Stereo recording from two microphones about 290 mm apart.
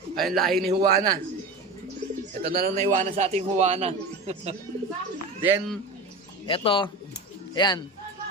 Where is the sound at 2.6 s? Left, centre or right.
Right.